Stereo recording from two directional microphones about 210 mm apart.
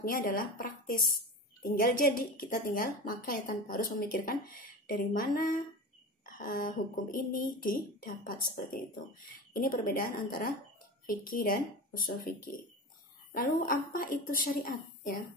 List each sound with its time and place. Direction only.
0.0 s a woman's voice: 45° left (ahead or behind)